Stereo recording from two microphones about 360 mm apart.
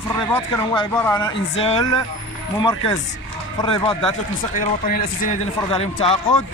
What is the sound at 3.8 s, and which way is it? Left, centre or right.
A man's voice, centre.